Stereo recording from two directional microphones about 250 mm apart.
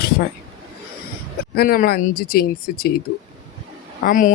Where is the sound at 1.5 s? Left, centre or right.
Left.